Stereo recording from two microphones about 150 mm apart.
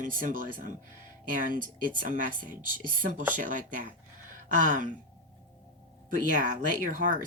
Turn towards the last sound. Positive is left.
turn(degrees=-60)  # may be behind; listen again after turning